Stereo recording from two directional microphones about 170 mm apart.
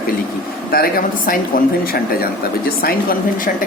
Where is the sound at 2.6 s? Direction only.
60° left (ahead or behind).